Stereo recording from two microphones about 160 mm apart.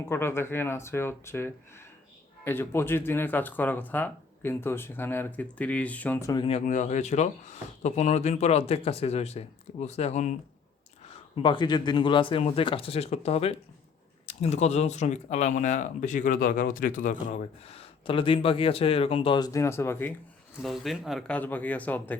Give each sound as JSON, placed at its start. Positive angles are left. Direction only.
{"t": 0.1, "sound": "speech", "side_deg": 15}
{"t": 6.7, "sound": "speech", "side_deg": 50}
{"t": 11.4, "sound": "speech", "side_deg": 30}
{"t": 20.6, "sound": "speech", "side_deg": 0}